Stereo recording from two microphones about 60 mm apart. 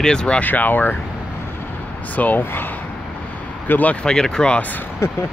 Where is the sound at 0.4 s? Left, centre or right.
Left.